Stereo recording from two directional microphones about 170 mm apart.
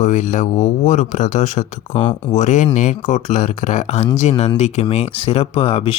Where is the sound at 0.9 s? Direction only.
45° left (ahead or behind).